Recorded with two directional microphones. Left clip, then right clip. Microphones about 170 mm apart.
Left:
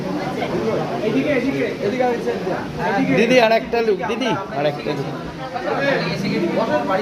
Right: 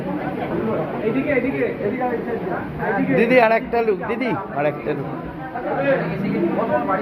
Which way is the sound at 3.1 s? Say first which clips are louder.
Even; 20° left (ahead or behind).